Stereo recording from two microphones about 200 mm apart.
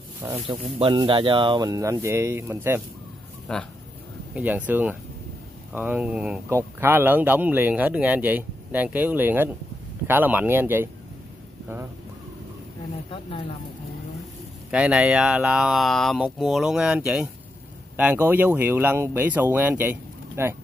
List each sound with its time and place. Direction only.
0.5 s speech: 25° right (ahead or behind); by 2.8 s 10° right (ahead or behind)
3.5 s speech: 5° left (ahead or behind)
4.4 s speech: 5° right (ahead or behind)
14.7 s speech: 5° right (ahead or behind)